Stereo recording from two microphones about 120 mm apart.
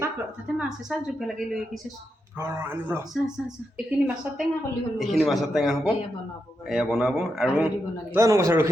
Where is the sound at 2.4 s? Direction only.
20° right (ahead or behind).